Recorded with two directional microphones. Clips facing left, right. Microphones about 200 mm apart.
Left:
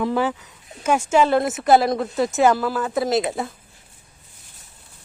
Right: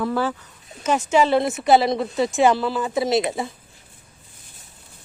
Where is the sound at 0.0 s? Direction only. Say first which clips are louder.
Left 1 dB; 20° left (ahead or behind).